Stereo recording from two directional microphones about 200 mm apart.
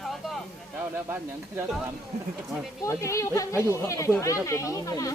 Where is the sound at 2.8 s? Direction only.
15° left (ahead or behind).